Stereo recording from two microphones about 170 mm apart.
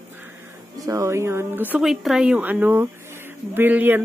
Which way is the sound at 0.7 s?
20° right (ahead or behind).